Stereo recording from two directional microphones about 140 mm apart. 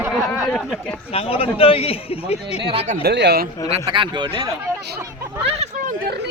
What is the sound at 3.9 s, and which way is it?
Speech, 35° right (ahead or behind).